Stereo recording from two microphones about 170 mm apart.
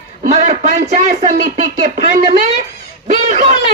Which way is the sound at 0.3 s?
40° right (ahead or behind).